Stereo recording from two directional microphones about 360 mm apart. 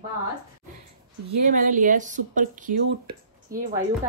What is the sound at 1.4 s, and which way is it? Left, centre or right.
Speech, right.